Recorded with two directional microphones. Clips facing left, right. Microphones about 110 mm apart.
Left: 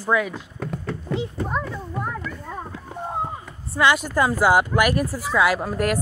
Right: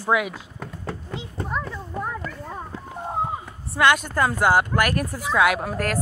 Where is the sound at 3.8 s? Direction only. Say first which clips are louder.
Even; 5° left (ahead or behind).